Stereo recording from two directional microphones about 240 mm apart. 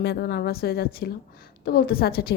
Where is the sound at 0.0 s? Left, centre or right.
Left.